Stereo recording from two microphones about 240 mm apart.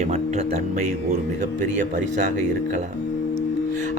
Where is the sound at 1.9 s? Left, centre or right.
Right.